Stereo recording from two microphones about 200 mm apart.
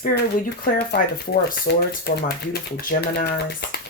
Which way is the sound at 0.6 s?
50° left (ahead or behind).